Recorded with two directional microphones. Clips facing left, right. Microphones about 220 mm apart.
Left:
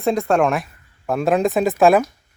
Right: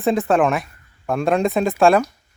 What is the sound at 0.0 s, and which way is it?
Speech, centre (ahead or behind).